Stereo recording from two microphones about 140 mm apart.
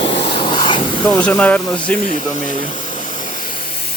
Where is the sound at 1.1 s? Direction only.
10° left (ahead or behind).